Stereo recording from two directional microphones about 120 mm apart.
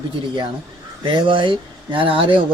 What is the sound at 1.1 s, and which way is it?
Speech, 45° right (ahead or behind).